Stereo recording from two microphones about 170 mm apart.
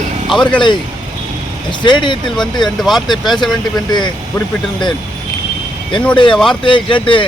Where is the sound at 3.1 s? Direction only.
25° left (ahead or behind).